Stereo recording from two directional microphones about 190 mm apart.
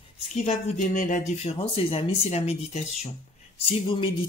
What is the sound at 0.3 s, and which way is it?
Speech, 40° left (ahead or behind).